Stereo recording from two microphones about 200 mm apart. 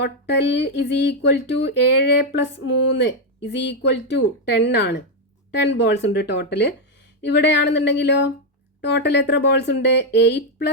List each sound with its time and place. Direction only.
0.0 s speech: 60° left (ahead or behind)